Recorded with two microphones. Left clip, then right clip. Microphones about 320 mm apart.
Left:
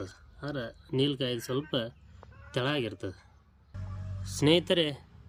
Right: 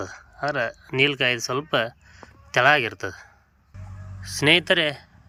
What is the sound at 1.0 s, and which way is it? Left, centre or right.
Speech, right.